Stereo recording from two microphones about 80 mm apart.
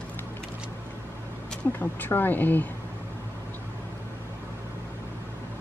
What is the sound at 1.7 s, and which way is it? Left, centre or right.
Speech, left.